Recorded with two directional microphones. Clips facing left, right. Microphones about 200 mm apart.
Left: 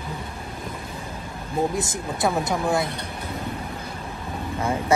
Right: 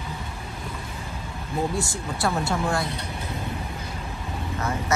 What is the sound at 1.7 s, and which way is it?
Speech, 20° left (ahead or behind).